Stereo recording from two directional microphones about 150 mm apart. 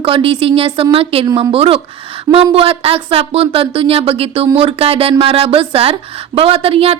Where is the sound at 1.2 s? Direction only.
30° right (ahead or behind).